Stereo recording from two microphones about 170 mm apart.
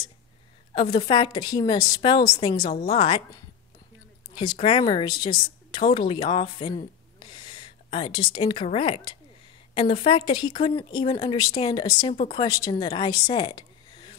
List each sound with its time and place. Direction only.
0.7 s a woman's voice: 25° left (ahead or behind)
4.4 s a woman's voice: 30° left (ahead or behind)